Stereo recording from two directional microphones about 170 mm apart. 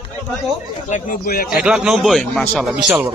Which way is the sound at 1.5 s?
5° right (ahead or behind).